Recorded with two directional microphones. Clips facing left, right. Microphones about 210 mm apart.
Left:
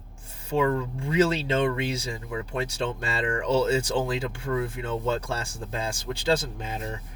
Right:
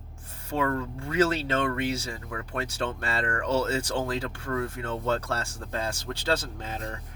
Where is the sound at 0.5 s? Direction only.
15° left (ahead or behind).